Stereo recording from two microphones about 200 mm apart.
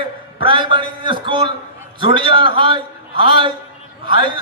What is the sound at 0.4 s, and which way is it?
A man's voice, 25° right (ahead or behind).